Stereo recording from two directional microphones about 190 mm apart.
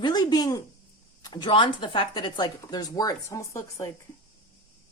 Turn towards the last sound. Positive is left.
turn(degrees=15)  # may be behind; listen again after turning